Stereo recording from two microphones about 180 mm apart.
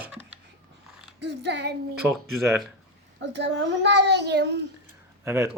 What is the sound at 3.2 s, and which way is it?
A child's voice, 80° right.